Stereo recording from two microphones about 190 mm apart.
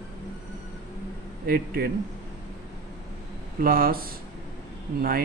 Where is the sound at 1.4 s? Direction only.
50° right (ahead or behind).